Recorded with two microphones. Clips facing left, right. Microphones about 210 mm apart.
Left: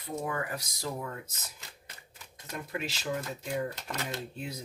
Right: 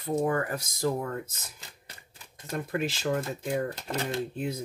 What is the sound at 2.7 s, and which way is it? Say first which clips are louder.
Speech: right 6 dB; 55° right (ahead or behind).